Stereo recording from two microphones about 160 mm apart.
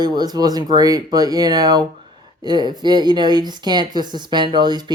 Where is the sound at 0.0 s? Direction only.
25° right (ahead or behind).